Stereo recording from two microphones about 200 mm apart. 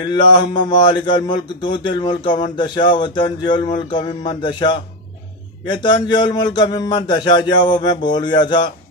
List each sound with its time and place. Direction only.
0.0 s speech: 20° left (ahead or behind)